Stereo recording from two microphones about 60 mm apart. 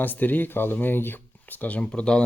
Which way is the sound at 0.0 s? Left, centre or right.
Left.